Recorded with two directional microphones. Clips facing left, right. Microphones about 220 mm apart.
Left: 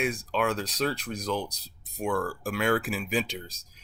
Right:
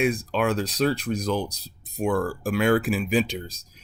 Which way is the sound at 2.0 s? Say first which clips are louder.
Right 5 dB; 20° right (ahead or behind).